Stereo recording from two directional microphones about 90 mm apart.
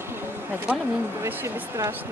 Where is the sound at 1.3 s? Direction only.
20° right (ahead or behind).